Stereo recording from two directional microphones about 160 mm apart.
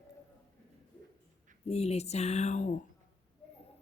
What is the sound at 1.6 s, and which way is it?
Speech, 40° left (ahead or behind).